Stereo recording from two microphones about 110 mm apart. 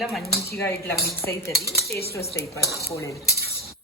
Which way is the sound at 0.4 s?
25° left (ahead or behind).